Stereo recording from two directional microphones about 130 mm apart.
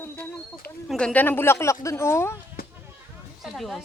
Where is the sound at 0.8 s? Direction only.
5° left (ahead or behind).